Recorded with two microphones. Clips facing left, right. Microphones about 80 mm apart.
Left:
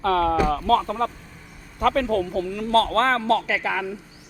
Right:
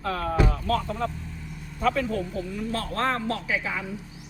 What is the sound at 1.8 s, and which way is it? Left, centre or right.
A man's voice, left.